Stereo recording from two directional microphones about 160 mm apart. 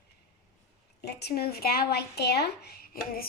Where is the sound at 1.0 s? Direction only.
90° left; by 3.2 s 70° left (ahead or behind).